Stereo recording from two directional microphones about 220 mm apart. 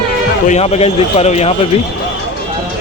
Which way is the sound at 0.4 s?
30° left (ahead or behind).